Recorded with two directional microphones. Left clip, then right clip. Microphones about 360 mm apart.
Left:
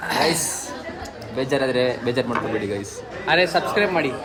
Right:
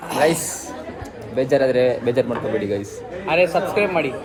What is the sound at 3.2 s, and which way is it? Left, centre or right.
Speech, left.